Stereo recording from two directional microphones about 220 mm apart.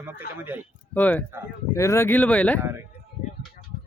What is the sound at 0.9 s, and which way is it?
Speech, 5° left (ahead or behind).